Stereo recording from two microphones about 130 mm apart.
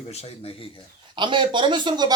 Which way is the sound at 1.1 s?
35° right (ahead or behind).